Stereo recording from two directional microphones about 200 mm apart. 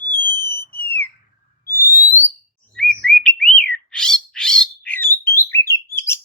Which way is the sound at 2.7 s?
5° left (ahead or behind).